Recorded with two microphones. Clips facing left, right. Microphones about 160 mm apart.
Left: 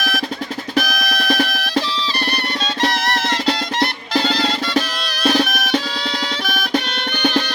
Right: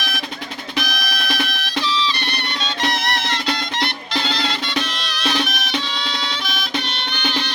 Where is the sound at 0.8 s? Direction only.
45° left (ahead or behind).